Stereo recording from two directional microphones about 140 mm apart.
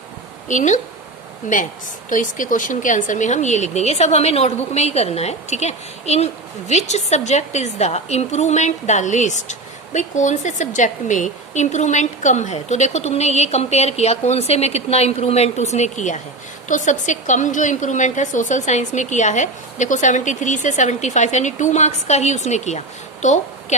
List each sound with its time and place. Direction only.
0.4 s a woman's voice: 60° left (ahead or behind)
2.0 s a woman's voice: 70° left (ahead or behind)
23.2 s a sound: 60° left (ahead or behind)